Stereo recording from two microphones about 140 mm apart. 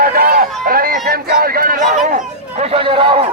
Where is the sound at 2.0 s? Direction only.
55° right (ahead or behind); by 3.2 s 40° right (ahead or behind).